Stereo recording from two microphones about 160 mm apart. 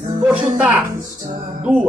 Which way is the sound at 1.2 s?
55° right (ahead or behind).